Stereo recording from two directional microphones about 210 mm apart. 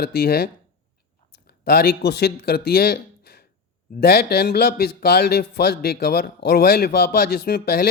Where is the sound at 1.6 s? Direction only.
50° left (ahead or behind).